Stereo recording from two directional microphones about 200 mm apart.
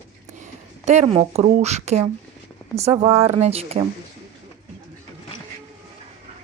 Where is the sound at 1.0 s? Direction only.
30° right (ahead or behind).